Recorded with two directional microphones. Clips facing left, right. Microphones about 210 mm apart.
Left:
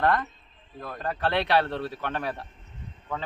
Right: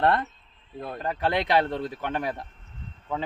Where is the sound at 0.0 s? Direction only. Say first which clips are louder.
Right 1 dB; 25° right (ahead or behind).